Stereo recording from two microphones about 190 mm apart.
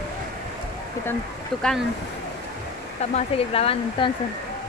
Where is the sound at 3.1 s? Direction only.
30° left (ahead or behind).